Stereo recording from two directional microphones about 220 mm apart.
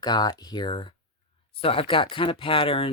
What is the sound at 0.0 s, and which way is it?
Speech, 20° left (ahead or behind).